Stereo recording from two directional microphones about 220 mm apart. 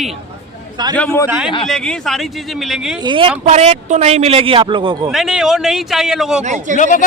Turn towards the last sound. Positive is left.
turn(degrees=35)  # may be behind; listen again after turning